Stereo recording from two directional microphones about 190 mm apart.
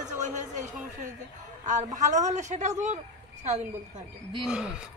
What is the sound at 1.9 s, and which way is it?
Speech, 40° right (ahead or behind).